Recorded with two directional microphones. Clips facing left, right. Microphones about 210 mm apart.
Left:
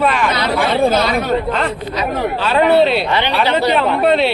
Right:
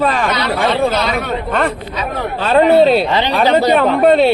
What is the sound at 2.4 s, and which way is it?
Speech, 40° right (ahead or behind).